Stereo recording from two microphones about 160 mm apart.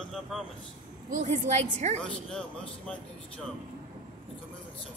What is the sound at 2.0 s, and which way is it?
Speech, 5° left (ahead or behind).